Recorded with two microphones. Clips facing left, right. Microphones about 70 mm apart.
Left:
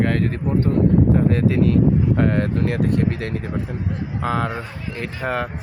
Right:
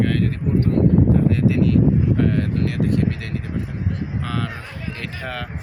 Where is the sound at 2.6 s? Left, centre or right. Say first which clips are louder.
Left 1 dB; left.